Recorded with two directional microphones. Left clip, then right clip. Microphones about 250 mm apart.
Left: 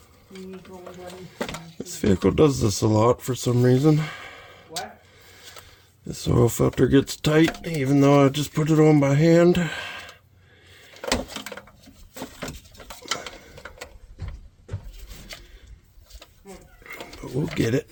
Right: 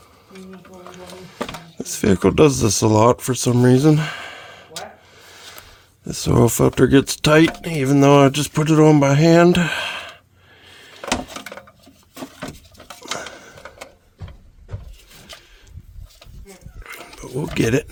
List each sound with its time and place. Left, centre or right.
1.8 s speech: right
6.1 s speech: right
16.8 s a sound: right